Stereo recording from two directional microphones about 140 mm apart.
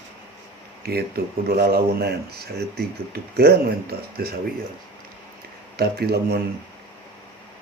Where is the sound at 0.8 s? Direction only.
90° right.